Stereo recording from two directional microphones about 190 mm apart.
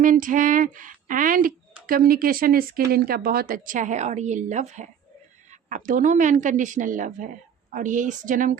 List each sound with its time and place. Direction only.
0.0 s a woman's voice: 45° right (ahead or behind)